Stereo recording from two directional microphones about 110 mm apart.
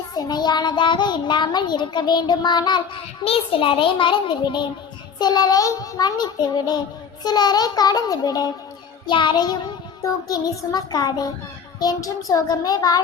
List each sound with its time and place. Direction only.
0.1 s a child's voice: 40° left (ahead or behind)
3.2 s a child's voice: 60° left (ahead or behind)
5.2 s child singing: 40° left (ahead or behind)
9.0 s a child's voice: 45° left (ahead or behind)
10.0 s child singing: 35° left (ahead or behind)